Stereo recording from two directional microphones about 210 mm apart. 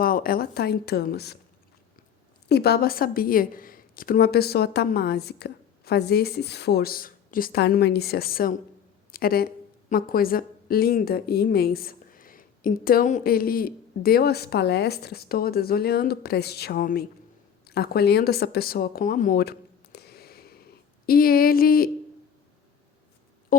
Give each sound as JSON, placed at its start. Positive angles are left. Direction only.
{"t": 0.0, "sound": "a woman's voice", "side_deg": 45}
{"t": 2.5, "sound": "a woman's voice", "side_deg": 50}
{"t": 23.5, "sound": "a sound", "side_deg": 40}